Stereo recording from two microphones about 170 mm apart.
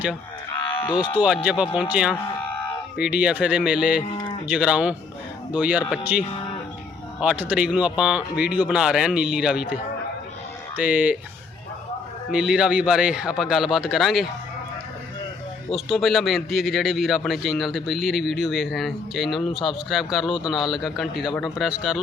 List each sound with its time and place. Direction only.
0.9 s speech: 25° left (ahead or behind)
1.2 s a man's voice: 5° right (ahead or behind)
4.1 s moo: 30° left (ahead or behind)
4.4 s a man's voice: 5° right (ahead or behind)
7.2 s a man's voice: 5° right (ahead or behind)
10.8 s speech: 5° right (ahead or behind)
12.3 s a man's voice: 5° right (ahead or behind)
15.7 s a man's voice: centre (ahead or behind)